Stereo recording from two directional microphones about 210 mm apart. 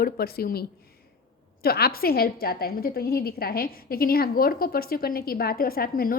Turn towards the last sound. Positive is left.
turn(degrees=45)  # may be behind; listen again after turning